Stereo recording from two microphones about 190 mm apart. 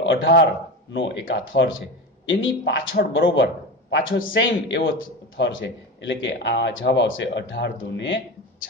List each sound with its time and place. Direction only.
0.0 s a man's voice: 70° left (ahead or behind); by 5.6 s 90° left
6.0 s speech: 70° left (ahead or behind)